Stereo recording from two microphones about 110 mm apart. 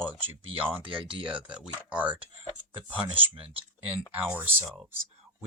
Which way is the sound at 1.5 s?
10° right (ahead or behind).